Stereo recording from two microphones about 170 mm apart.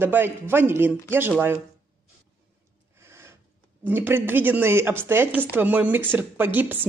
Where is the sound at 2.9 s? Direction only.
15° right (ahead or behind).